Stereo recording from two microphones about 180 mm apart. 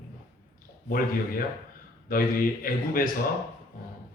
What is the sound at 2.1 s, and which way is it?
Speech, 50° left (ahead or behind).